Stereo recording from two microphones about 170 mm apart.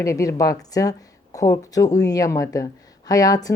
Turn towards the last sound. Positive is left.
turn(degrees=20)  # may be behind; listen again after turning